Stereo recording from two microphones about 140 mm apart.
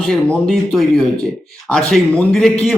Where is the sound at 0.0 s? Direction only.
5° left (ahead or behind).